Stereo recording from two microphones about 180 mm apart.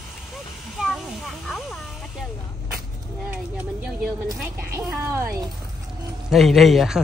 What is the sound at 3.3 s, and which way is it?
Speech, 5° right (ahead or behind).